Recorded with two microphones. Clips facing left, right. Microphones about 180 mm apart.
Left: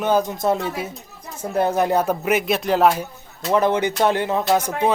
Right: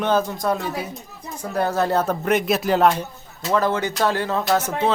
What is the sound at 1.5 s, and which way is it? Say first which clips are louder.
Speech: left 2 dB; 20° left (ahead or behind).